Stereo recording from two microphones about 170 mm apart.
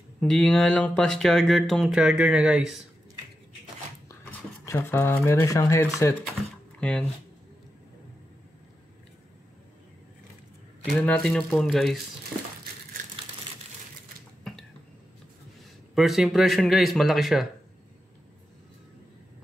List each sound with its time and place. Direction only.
0.2 s speech: 5° left (ahead or behind)
4.1 s speech: 15° left (ahead or behind)
6.8 s speech: 5° left (ahead or behind)
10.9 s speech: 5° left (ahead or behind)
14.4 s a sound: 5° left (ahead or behind)
15.9 s speech: centre (ahead or behind)